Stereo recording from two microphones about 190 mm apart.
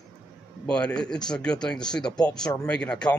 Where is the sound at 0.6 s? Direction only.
5° left (ahead or behind).